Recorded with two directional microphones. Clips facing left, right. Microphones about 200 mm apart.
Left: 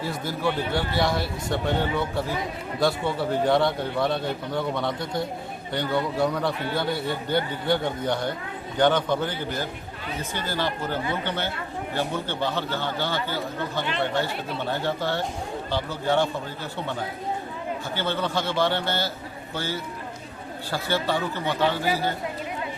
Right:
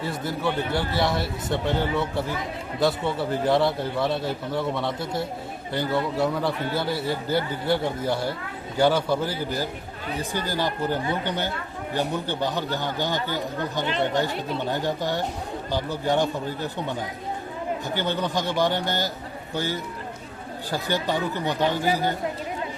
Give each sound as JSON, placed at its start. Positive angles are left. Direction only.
{"t": 0.0, "sound": "a man's voice", "side_deg": 0}
{"t": 17.9, "sound": "a man's voice", "side_deg": -15}